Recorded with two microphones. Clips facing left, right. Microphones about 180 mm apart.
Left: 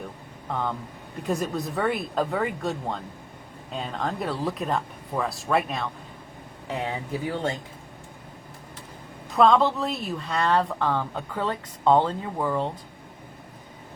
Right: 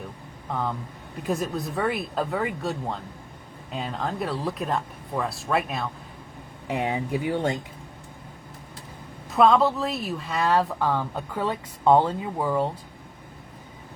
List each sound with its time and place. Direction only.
0.4 s speech: centre (ahead or behind)
6.7 s speech: 15° right (ahead or behind)
9.3 s speech: 5° right (ahead or behind)